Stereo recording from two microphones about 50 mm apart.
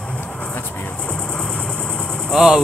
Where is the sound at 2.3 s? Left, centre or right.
Centre.